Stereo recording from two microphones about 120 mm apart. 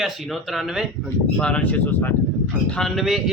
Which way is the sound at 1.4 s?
10° left (ahead or behind).